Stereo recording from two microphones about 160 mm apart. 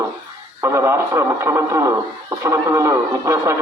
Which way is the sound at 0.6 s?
15° right (ahead or behind).